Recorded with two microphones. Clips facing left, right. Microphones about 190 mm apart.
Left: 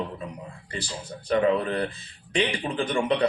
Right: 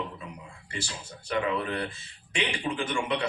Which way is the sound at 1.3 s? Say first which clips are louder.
Left 6 dB; 35° left (ahead or behind).